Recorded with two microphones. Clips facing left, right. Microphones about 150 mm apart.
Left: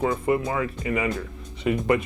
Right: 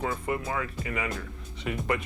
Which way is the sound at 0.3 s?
20° left (ahead or behind).